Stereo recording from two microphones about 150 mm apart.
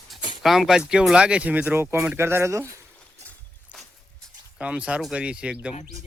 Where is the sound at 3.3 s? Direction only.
Centre (ahead or behind).